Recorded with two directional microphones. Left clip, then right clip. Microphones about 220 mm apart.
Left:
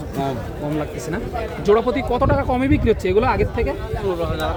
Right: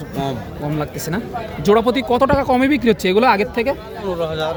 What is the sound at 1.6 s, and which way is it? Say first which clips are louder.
A man's voice: right 2 dB; 45° right (ahead or behind).